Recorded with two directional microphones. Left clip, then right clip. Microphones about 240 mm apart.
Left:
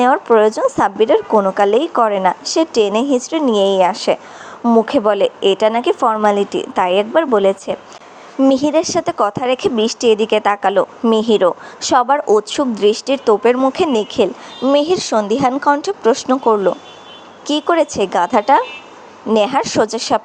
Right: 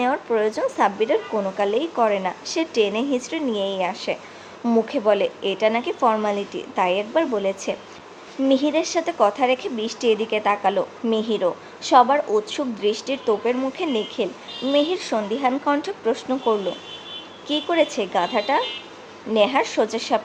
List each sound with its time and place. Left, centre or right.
0.0 s a woman's voice: centre